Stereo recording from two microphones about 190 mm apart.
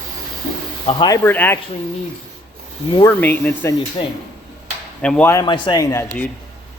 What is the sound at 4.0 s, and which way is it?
Speech, 25° left (ahead or behind).